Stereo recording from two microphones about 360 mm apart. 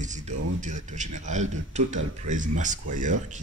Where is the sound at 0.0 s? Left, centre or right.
Centre.